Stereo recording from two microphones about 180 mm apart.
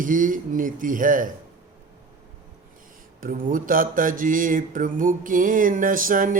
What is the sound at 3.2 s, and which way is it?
A man's voice, 50° right (ahead or behind).